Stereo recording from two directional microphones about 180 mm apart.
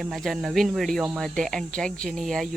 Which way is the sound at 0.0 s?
Centre (ahead or behind).